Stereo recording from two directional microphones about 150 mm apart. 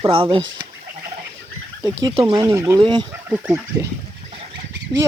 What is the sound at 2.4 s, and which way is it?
Speech, 20° right (ahead or behind).